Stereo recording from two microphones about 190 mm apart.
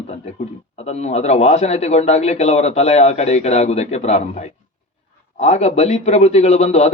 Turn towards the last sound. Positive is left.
turn(degrees=35)  # may be behind; listen again after turning